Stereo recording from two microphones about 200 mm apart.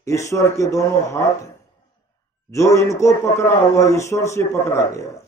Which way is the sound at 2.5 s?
15° left (ahead or behind).